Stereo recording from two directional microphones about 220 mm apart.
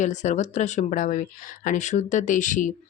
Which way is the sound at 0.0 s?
35° left (ahead or behind).